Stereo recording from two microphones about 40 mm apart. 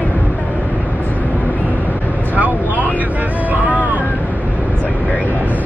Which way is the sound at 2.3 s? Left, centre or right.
Right.